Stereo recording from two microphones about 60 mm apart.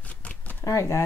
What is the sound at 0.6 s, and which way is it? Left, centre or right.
Speech, left.